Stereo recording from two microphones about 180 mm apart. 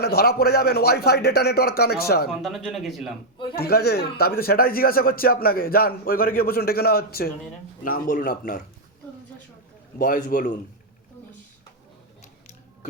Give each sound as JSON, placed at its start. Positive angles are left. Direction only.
{"t": 0.0, "sound": "a man's voice", "side_deg": 60}
{"t": 2.4, "sound": "speech", "side_deg": 0}
{"t": 3.5, "sound": "a man's voice", "side_deg": 60}
{"t": 10.0, "sound": "speech", "side_deg": 45}